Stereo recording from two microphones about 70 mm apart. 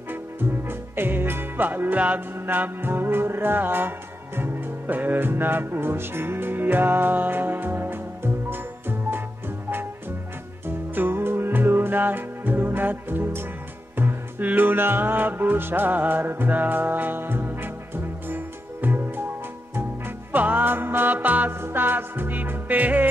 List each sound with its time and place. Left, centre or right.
0.1 s music: right
11.0 s music: right
20.3 s music: right